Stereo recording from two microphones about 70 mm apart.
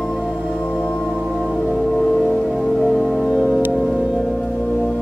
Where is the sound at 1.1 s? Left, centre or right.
Centre.